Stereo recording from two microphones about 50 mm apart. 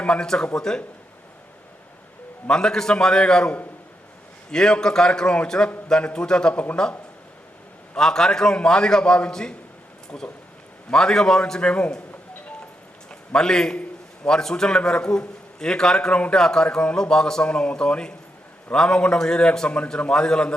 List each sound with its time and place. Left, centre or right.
0.0 s a man's voice: centre
2.5 s a man's voice: centre
4.5 s a man's voice: centre
6.5 s speech: left
7.9 s a man's voice: centre
10.1 s speech: left
10.9 s a man's voice: centre
13.1 s a man's voice: centre